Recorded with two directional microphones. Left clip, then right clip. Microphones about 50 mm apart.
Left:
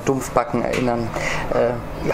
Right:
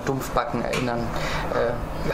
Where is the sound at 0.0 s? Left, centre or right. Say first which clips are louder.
Left 5 dB; left.